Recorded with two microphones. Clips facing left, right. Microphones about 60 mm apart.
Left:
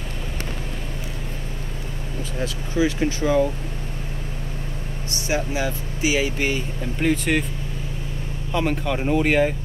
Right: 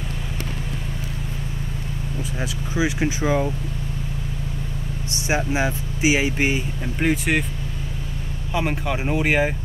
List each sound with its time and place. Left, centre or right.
2.3 s speech: centre
5.3 s speech: right
8.5 s speech: centre